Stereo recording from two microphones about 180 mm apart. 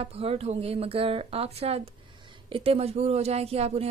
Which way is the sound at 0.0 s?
35° right (ahead or behind).